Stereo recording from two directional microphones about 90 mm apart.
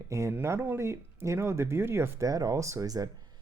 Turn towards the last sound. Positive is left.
turn(degrees=-45)  # may be behind; listen again after turning